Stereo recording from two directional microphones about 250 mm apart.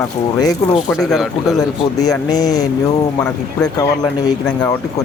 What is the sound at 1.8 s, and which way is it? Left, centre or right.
Speech, centre.